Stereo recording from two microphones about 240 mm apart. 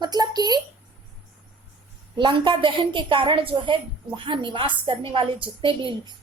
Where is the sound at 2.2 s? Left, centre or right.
Centre.